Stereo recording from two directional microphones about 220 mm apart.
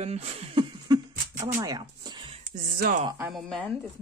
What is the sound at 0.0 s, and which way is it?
Speech, 30° right (ahead or behind).